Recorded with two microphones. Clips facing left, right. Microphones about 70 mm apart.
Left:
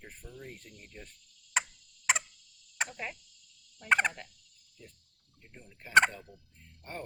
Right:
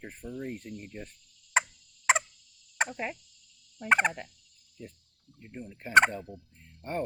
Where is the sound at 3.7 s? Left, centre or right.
Right.